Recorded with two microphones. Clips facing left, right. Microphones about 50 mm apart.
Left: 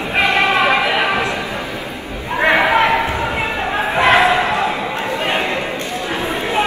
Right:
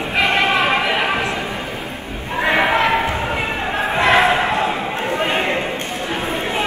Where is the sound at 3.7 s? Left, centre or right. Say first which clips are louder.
Left 2 dB; centre.